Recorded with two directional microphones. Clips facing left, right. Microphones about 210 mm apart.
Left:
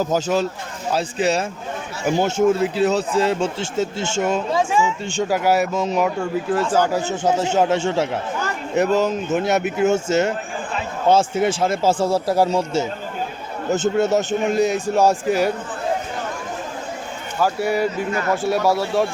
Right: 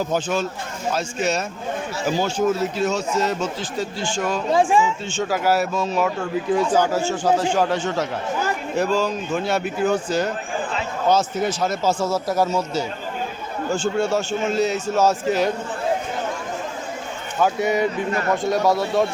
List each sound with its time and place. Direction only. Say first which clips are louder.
0.1 s speech: left 3 dB; 40° left (ahead or behind)
2.0 s a man's voice: left 4 dB; 20° left (ahead or behind)
4.5 s speech: right 5 dB; 35° right (ahead or behind)
5.0 s a man's voice: left 2 dB; 15° left (ahead or behind)
17.4 s speech: even; 5° left (ahead or behind)